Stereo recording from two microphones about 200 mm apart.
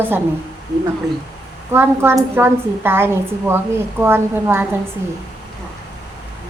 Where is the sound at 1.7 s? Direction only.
10° right (ahead or behind).